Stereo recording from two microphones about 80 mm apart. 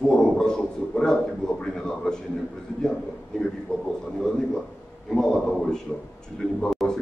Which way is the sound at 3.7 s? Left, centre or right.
Centre.